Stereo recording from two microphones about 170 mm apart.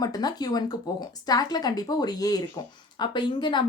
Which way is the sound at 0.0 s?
25° left (ahead or behind).